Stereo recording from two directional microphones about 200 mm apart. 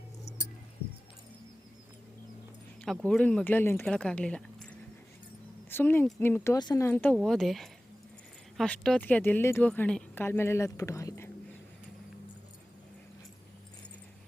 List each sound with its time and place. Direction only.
0.3 s music: 30° left (ahead or behind)
2.8 s speech: centre (ahead or behind)
5.7 s speech: 10° left (ahead or behind)